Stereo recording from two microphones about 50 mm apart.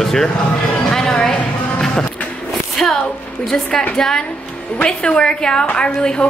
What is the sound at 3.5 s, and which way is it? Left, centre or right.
A woman's voice, centre.